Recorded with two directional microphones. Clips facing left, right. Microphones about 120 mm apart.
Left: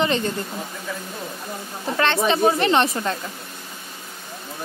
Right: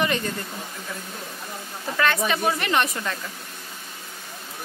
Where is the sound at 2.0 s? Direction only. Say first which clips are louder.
Left 4 dB; 30° left (ahead or behind).